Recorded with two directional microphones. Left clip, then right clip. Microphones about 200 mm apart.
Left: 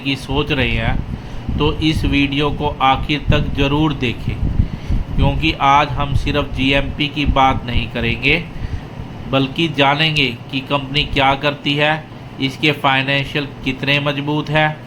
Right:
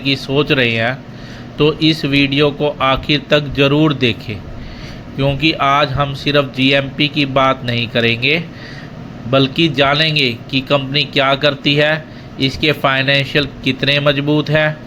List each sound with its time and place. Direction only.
0.0 s speech: 10° right (ahead or behind)